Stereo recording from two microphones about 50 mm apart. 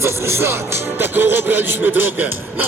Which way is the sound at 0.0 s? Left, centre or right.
Right.